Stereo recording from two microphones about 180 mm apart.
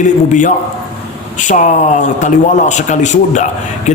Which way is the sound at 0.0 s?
45° left (ahead or behind).